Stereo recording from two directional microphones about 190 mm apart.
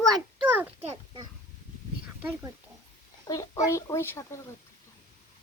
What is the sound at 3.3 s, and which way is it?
Speech, 20° left (ahead or behind).